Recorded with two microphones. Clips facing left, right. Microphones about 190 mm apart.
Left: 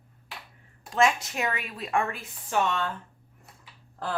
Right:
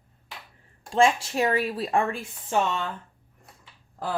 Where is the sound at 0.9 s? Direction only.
30° right (ahead or behind).